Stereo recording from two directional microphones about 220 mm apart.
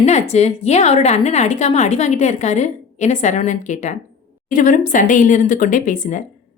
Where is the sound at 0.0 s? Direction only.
30° left (ahead or behind).